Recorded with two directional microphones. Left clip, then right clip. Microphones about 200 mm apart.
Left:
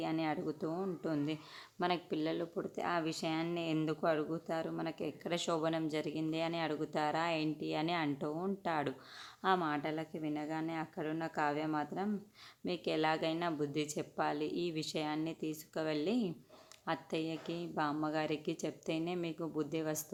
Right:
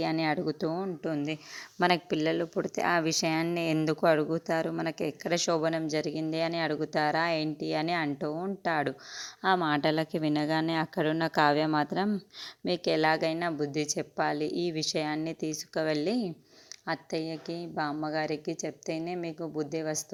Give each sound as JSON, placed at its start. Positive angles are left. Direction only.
{"t": 0.0, "sound": "speech", "side_deg": -30}
{"t": 1.8, "sound": "a woman's voice", "side_deg": -35}